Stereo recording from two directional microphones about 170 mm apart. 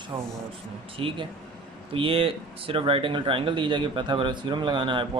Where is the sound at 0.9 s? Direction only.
30° right (ahead or behind).